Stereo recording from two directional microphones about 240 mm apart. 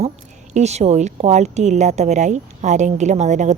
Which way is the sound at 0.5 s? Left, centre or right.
Right.